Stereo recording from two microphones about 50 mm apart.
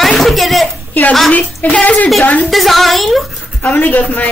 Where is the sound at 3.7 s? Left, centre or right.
Left.